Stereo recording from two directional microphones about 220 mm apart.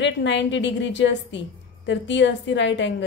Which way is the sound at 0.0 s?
55° left (ahead or behind).